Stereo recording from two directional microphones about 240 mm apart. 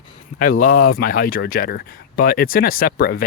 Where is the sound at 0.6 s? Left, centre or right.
Left.